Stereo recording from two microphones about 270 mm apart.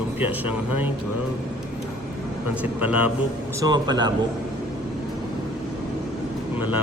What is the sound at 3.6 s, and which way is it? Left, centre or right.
Speech, centre.